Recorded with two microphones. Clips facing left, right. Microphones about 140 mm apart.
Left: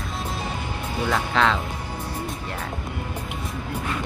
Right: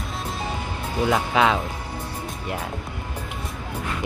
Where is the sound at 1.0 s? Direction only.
15° right (ahead or behind).